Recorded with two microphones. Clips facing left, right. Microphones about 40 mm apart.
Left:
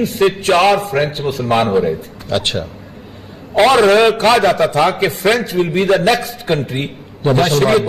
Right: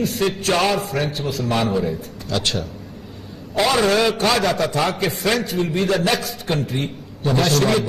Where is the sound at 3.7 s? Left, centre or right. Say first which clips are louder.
Left 7 dB; left.